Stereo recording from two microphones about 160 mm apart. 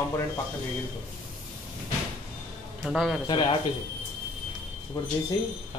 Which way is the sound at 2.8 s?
Centre (ahead or behind).